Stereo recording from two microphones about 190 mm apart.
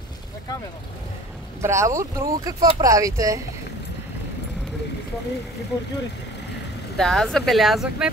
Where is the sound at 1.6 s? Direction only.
15° right (ahead or behind).